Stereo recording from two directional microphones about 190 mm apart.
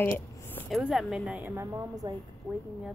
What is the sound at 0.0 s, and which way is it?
A woman's voice, 10° left (ahead or behind).